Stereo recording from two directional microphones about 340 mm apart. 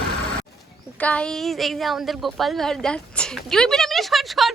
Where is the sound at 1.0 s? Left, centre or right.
Centre.